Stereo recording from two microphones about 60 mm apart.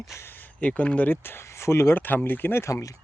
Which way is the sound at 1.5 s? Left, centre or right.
Left.